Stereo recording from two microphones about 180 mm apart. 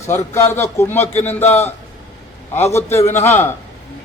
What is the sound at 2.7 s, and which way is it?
Speech, 15° left (ahead or behind).